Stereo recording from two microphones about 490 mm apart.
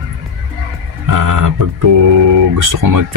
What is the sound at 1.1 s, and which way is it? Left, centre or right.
Speech, right.